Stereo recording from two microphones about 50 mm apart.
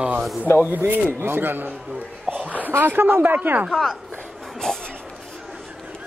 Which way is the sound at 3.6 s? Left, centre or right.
Centre.